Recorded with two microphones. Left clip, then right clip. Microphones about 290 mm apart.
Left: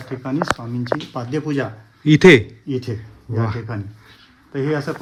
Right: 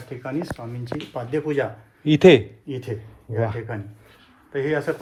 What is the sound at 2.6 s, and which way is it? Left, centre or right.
Speech, left.